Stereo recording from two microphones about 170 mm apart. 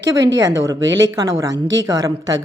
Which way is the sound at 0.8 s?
90° right.